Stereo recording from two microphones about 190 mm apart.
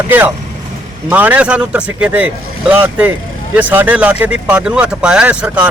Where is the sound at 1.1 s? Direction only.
10° right (ahead or behind).